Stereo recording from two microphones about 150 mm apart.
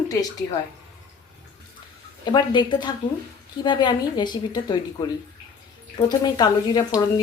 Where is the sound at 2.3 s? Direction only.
30° left (ahead or behind).